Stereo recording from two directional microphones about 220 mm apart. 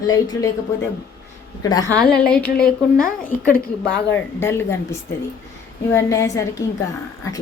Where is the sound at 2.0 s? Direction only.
5° left (ahead or behind).